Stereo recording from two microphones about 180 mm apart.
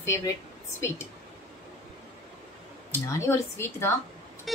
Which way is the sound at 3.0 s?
15° left (ahead or behind).